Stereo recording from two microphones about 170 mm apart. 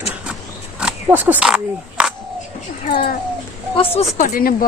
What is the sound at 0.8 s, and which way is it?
Speech, 10° right (ahead or behind).